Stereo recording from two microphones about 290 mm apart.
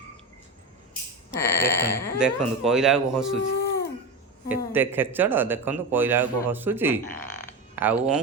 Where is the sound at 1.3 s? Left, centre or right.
Centre.